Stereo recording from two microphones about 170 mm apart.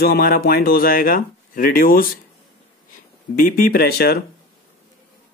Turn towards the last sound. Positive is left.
turn(degrees=65)  # may be behind; listen again after turning